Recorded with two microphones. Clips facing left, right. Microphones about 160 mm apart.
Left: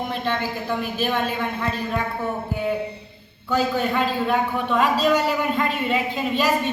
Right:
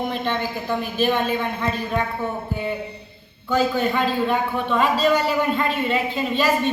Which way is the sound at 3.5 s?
5° left (ahead or behind).